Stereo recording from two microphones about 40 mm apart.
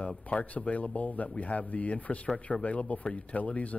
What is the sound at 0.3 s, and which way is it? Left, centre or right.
Speech, left.